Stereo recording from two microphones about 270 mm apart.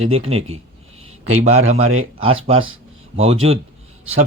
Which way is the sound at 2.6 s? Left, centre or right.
Right.